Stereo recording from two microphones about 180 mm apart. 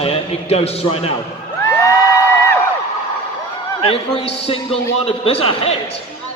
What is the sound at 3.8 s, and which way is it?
A man's voice, 30° left (ahead or behind).